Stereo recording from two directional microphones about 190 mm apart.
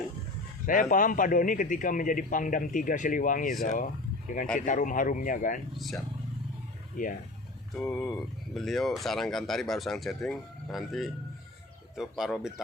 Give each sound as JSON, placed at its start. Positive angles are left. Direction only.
{"t": 0.6, "sound": "a man's voice", "side_deg": 45}
{"t": 5.7, "sound": "speech", "side_deg": 0}
{"t": 7.0, "sound": "a man's voice", "side_deg": 45}
{"t": 7.8, "sound": "speech", "side_deg": 5}